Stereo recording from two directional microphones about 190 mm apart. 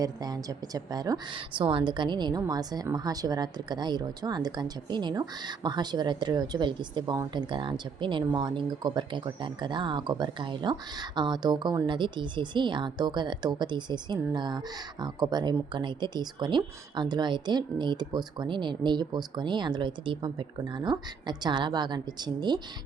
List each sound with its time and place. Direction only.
0.0 s a woman's voice: 20° right (ahead or behind)